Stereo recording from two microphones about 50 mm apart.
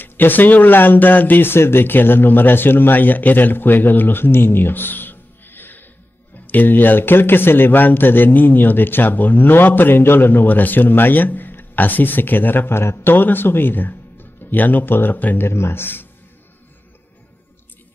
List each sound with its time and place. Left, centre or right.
0.0 s a man's voice: left
13.1 s a man's voice: left
15.4 s speech: left